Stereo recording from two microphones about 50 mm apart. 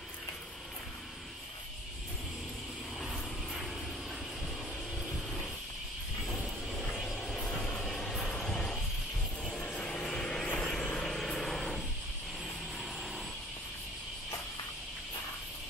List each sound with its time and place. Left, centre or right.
3.0 s vehicle: centre
6.3 s vehicle: left
7.4 s music: centre
8.3 s vehicle: centre
9.8 s vehicle: left; by 13.2 s centre